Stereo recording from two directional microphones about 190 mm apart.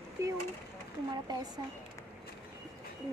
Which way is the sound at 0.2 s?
15° right (ahead or behind).